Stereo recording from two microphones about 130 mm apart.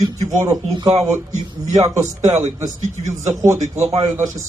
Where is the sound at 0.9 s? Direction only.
60° right (ahead or behind).